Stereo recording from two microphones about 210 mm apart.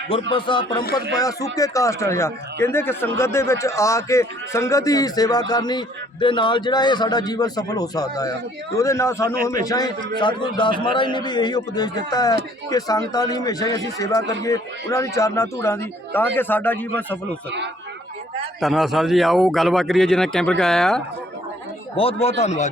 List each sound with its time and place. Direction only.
0.1 s a man's voice: 25° left (ahead or behind); by 17.2 s 10° left (ahead or behind)
18.6 s speech: centre (ahead or behind)
21.9 s speech: 30° left (ahead or behind)